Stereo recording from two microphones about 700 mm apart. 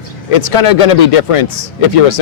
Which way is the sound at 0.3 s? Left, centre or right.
Left.